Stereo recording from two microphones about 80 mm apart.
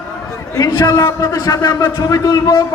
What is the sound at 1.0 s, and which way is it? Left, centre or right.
Speech, left.